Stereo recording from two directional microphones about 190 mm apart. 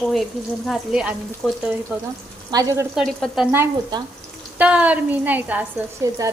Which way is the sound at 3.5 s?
20° right (ahead or behind).